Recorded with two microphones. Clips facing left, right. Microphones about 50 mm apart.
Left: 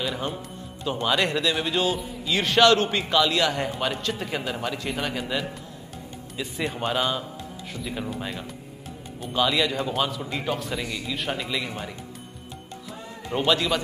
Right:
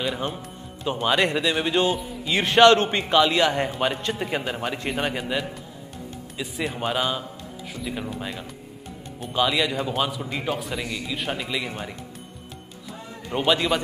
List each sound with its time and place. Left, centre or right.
0.0 s speech: centre
2.2 s a man's voice: right
5.1 s a man's voice: centre
13.3 s speech: centre